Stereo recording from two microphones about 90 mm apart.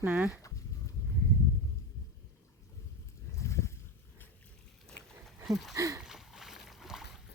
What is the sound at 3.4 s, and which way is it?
Boat, 30° left (ahead or behind).